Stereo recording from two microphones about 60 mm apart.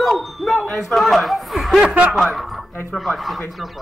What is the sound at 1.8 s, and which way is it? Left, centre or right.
Speech, right.